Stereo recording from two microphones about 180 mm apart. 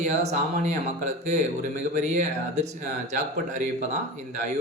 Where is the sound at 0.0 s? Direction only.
40° right (ahead or behind).